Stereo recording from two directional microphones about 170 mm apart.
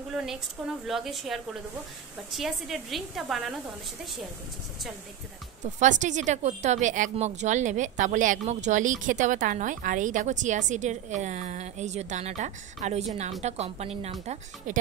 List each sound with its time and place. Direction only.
0.1 s a woman's voice: centre (ahead or behind)
5.8 s a woman's voice: 45° right (ahead or behind)